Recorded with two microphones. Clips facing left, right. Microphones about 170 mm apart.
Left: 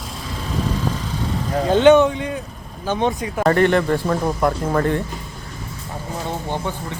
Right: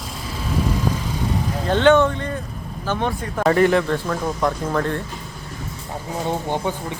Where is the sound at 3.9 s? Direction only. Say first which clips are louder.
Left 3 dB; 10° left (ahead or behind).